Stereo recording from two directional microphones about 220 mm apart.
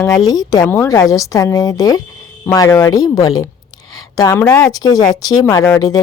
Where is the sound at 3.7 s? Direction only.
20° left (ahead or behind).